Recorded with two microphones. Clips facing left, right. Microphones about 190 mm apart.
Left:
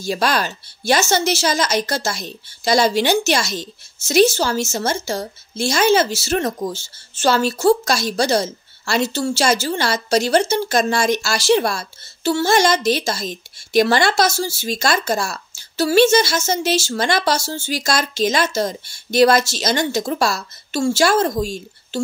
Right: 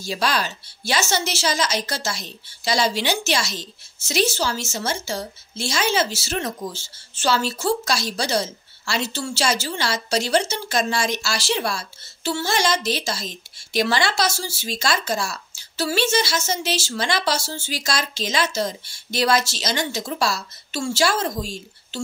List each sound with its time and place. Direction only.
0.0 s a woman's voice: 50° left (ahead or behind)